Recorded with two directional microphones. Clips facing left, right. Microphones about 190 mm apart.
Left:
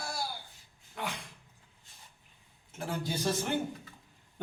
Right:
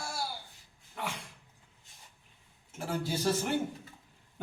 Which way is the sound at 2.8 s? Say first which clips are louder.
Right 1 dB; 5° right (ahead or behind).